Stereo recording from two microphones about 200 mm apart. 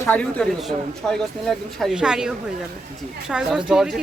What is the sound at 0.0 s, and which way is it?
A man's voice, 5° left (ahead or behind).